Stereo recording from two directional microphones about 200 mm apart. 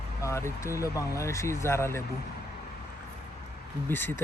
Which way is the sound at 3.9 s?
10° left (ahead or behind).